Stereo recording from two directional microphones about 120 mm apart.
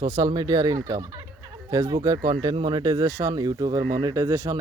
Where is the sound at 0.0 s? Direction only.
35° right (ahead or behind).